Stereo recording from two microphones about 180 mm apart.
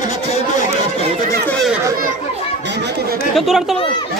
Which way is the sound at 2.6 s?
70° right (ahead or behind).